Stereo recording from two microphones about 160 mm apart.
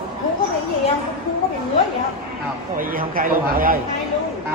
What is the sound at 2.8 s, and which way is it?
Speech, 60° right (ahead or behind).